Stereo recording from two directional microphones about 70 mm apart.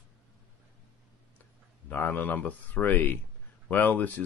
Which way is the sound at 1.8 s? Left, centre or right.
Left.